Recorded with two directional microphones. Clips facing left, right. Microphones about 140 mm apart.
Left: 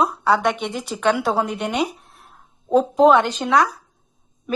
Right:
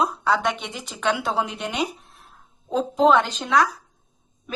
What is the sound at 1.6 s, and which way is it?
Speech, 65° left (ahead or behind).